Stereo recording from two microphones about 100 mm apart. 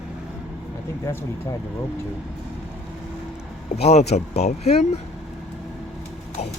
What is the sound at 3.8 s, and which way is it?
Speech, 90° left.